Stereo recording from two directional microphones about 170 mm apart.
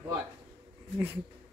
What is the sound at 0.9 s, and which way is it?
Speech, 10° right (ahead or behind).